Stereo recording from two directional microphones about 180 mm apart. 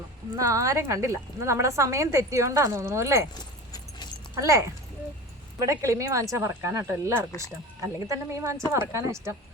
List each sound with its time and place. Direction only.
0.3 s a woman's voice: 15° right (ahead or behind)
3.3 s keys jangling: 25° left (ahead or behind)
4.4 s a woman's voice: 15° right (ahead or behind)